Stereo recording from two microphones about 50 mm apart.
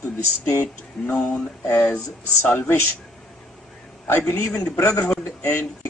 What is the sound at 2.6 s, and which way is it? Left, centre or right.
Speech, left.